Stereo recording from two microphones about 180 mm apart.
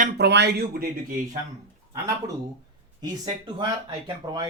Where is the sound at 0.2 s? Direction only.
70° right (ahead or behind).